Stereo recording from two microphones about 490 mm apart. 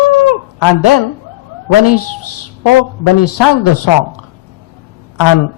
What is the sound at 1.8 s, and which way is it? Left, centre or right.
Speech, left.